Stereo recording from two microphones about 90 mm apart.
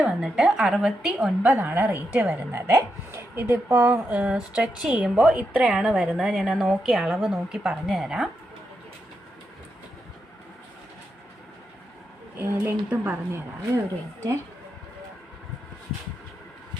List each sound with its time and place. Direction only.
0.2 s a woman's voice: 5° right (ahead or behind)
1.5 s speech: 20° right (ahead or behind)
2.5 s speech: 25° right (ahead or behind)
4.1 s a woman's voice: 15° right (ahead or behind)
12.4 s speech: 20° right (ahead or behind)